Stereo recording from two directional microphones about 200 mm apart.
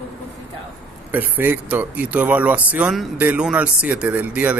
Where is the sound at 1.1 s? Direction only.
10° right (ahead or behind).